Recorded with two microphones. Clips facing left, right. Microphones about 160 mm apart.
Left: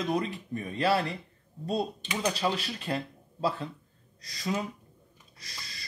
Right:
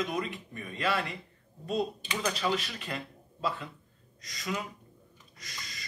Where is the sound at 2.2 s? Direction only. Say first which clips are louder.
Left 1 dB; 35° left (ahead or behind).